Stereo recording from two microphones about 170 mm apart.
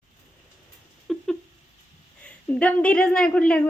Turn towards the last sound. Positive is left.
turn(degrees=5)  # may be behind; listen again after turning